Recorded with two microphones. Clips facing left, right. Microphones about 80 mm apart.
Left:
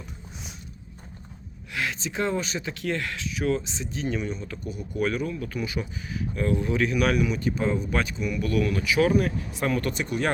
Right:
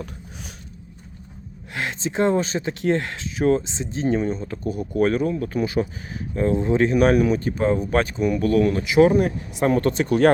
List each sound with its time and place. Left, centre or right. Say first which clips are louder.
1.7 s speech: right 4 dB; right